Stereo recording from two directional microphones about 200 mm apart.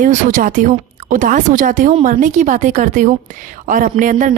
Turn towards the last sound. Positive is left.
turn(degrees=-40)  # may be behind; listen again after turning